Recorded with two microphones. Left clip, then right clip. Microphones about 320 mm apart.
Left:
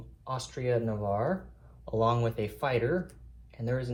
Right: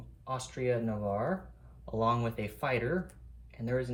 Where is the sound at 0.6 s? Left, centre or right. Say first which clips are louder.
Even; left.